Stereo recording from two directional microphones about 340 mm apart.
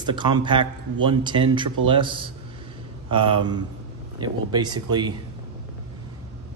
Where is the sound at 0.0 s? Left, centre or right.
Centre.